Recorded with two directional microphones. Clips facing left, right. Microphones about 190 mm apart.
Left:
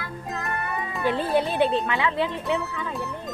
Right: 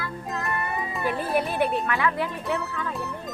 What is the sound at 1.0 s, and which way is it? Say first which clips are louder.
Speech: left 3 dB; 25° left (ahead or behind).